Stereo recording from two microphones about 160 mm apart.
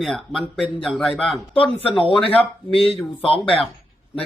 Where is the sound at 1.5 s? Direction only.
35° left (ahead or behind).